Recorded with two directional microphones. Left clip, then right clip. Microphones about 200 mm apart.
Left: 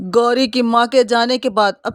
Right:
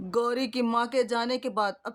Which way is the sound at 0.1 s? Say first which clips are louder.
Left 13 dB; 35° left (ahead or behind).